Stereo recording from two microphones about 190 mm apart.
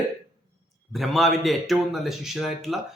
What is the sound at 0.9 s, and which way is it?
A man's voice, centre (ahead or behind).